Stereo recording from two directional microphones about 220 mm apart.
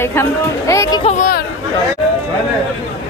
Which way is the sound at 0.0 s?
10° left (ahead or behind).